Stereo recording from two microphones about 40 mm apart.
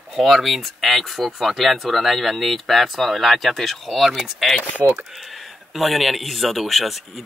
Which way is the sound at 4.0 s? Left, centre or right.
Centre.